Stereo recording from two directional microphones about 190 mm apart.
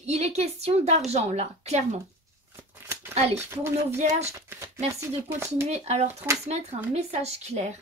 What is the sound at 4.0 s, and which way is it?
Speech, 40° right (ahead or behind).